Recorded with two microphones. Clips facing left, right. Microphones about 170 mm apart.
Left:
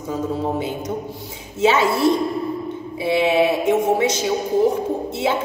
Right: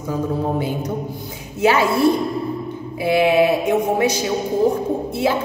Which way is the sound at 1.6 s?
25° left (ahead or behind).